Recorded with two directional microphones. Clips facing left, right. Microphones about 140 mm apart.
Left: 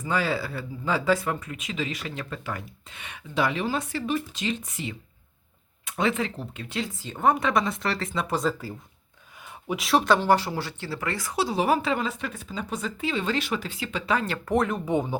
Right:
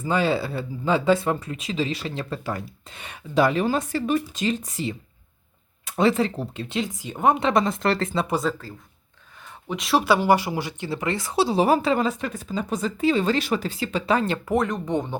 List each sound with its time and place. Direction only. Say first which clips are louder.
0.0 s speech: right 4 dB; 25° right (ahead or behind)
6.7 s speech: right 2 dB; 20° right (ahead or behind)
7.5 s speech: right 4 dB; 45° right (ahead or behind)
8.0 s speech: right 4 dB; 30° right (ahead or behind)
9.6 s speech: right 1 dB; centre (ahead or behind); by 14.3 s 35° right (ahead or behind)
14.4 s speech: right 1 dB; centre (ahead or behind)